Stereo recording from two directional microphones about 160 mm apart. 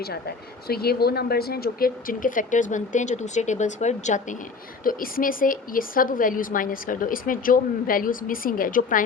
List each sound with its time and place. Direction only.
0.0 s speech: 75° left (ahead or behind); by 4.4 s 50° left (ahead or behind)
4.8 s a woman's voice: 60° left (ahead or behind)